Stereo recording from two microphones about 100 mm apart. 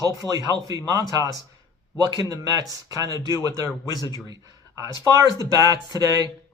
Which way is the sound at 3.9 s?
40° left (ahead or behind).